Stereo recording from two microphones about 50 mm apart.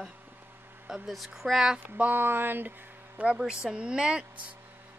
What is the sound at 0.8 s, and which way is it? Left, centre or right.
Speech, centre.